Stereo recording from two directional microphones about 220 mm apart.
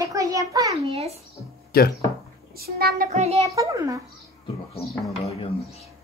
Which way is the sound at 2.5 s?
45° right (ahead or behind).